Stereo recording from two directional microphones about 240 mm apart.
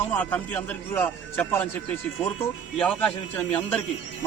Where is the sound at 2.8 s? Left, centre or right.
Centre.